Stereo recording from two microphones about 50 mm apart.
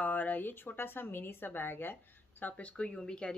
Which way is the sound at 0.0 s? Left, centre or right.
Left.